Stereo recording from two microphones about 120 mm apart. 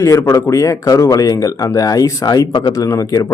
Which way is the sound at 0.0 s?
25° left (ahead or behind).